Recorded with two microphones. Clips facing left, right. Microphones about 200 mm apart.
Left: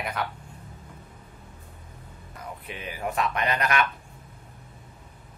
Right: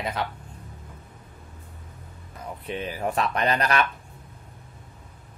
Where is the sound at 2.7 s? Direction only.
35° right (ahead or behind).